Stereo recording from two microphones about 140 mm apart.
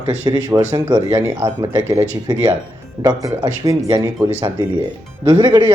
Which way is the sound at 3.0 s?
25° right (ahead or behind).